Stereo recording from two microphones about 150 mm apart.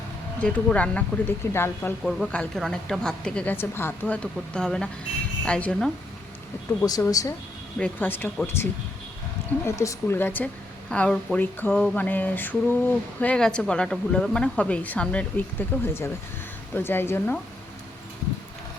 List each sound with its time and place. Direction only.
0.3 s speech: 10° left (ahead or behind)
2.0 s a woman's voice: centre (ahead or behind)
6.7 s speech: 20° left (ahead or behind)
7.8 s speech: 10° left (ahead or behind)
9.6 s speech: 20° left (ahead or behind)